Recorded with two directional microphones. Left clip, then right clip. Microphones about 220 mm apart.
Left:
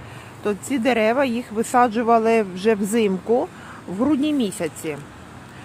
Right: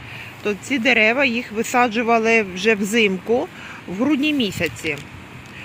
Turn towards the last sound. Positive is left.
turn(degrees=0)  # may be behind; listen again after turning